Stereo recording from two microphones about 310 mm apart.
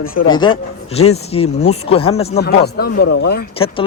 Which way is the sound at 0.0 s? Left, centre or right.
Left.